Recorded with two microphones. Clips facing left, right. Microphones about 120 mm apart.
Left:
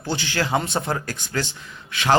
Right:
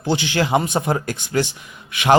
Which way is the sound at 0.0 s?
15° right (ahead or behind).